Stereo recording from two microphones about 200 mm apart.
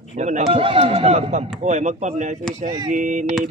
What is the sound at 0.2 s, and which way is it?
A man's voice, 30° right (ahead or behind).